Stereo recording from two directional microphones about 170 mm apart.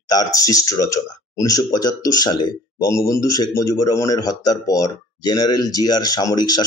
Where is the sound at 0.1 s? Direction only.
20° left (ahead or behind).